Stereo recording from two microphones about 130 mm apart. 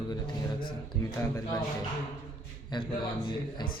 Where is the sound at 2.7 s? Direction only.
35° left (ahead or behind).